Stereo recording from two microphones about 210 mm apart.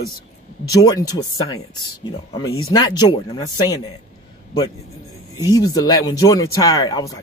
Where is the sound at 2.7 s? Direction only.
20° left (ahead or behind).